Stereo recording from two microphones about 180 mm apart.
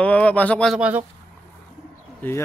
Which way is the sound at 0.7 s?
10° right (ahead or behind).